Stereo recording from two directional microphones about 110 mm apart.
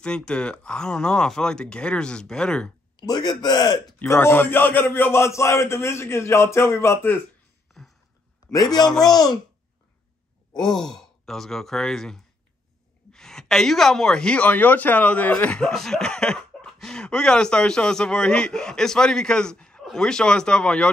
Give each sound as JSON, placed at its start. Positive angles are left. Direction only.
{"t": 0.0, "sound": "a woman's voice", "side_deg": 5}
{"t": 3.0, "sound": "a man's voice", "side_deg": 40}
{"t": 4.0, "sound": "a man's voice", "side_deg": 20}
{"t": 9.0, "sound": "speech", "side_deg": 35}
{"t": 10.7, "sound": "speech", "side_deg": 40}
{"t": 11.0, "sound": "a woman's voice", "side_deg": 5}